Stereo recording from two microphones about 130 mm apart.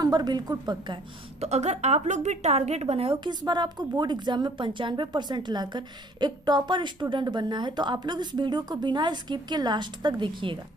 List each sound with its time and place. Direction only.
0.0 s a woman's voice: 30° right (ahead or behind)
1.4 s a woman's voice: 55° right (ahead or behind); by 10.6 s 40° right (ahead or behind)